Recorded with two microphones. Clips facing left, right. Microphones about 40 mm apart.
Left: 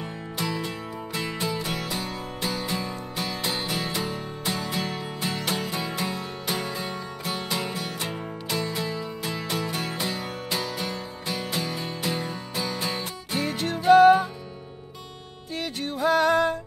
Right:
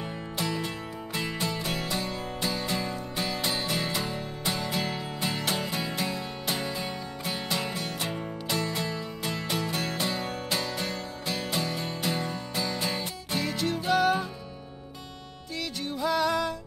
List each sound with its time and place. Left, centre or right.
0.0 s music: centre
13.4 s music: left
15.5 s music: left